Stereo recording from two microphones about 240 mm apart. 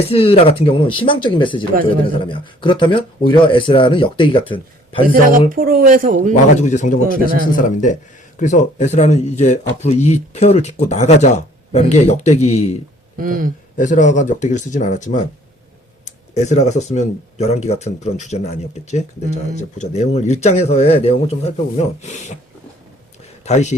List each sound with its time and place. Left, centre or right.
0.1 s speech: left
5.0 s speech: right
6.6 s speech: left
7.1 s speech: right
7.5 s speech: left
13.1 s speech: right
13.7 s speech: left
23.5 s speech: left